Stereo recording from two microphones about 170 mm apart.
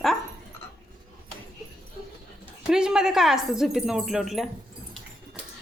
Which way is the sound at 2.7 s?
5° right (ahead or behind).